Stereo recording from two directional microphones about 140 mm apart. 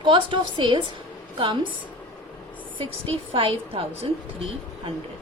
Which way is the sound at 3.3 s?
40° right (ahead or behind).